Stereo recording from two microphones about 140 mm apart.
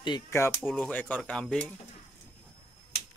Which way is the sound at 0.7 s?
5° left (ahead or behind).